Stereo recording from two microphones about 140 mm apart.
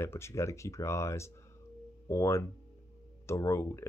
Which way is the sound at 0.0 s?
20° left (ahead or behind).